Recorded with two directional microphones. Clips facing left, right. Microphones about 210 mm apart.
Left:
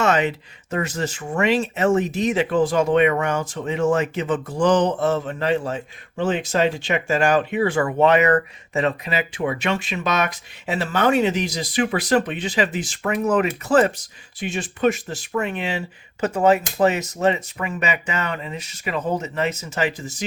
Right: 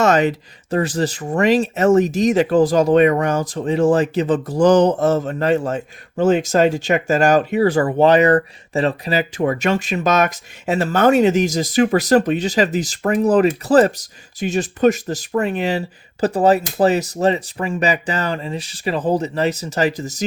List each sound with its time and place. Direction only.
0.0 s speech: 40° right (ahead or behind)